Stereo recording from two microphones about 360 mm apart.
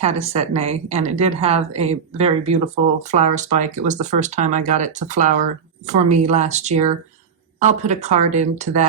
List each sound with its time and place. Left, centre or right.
0.0 s speech: centre